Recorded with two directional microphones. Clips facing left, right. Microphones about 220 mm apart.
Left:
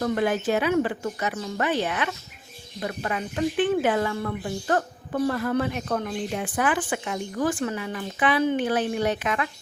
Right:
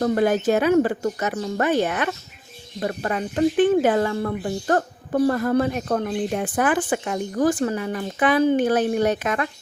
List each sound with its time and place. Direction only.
0.0 s speech: 40° right (ahead or behind)